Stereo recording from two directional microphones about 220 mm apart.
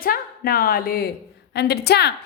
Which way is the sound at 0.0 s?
40° left (ahead or behind).